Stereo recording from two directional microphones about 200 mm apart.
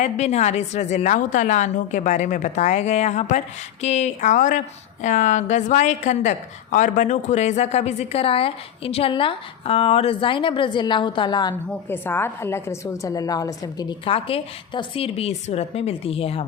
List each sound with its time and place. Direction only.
0.0 s a woman's voice: 35° left (ahead or behind)
11.9 s a woman's voice: 10° left (ahead or behind); by 16.5 s 30° left (ahead or behind)